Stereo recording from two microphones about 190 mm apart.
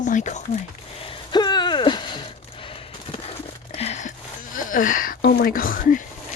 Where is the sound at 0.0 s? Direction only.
40° left (ahead or behind).